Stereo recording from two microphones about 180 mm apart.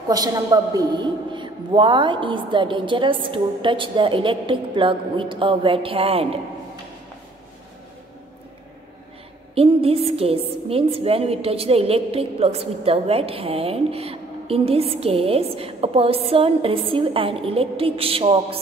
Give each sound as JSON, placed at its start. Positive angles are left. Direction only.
{"t": 0.1, "sound": "a woman's voice", "side_deg": -20}
{"t": 9.6, "sound": "a woman's voice", "side_deg": -30}